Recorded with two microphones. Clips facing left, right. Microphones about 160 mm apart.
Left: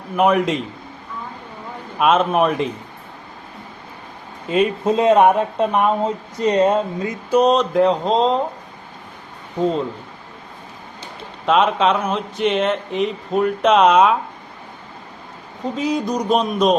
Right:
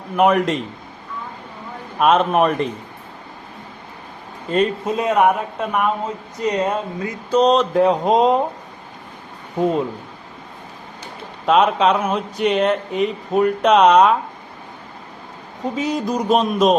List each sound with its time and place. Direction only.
0.2 s speech: centre (ahead or behind)
2.0 s speech: centre (ahead or behind)
4.4 s speech: 5° left (ahead or behind)
4.9 s speech: 25° left (ahead or behind)
7.3 s speech: 10° left (ahead or behind); by 8.4 s 15° right (ahead or behind)
9.6 s speech: 10° right (ahead or behind)
11.4 s speech: centre (ahead or behind)
15.6 s speech: centre (ahead or behind)